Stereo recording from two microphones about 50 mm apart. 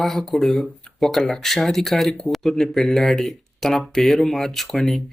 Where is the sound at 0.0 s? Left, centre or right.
Centre.